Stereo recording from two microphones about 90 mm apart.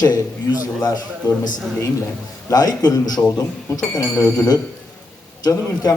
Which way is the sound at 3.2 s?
30° left (ahead or behind).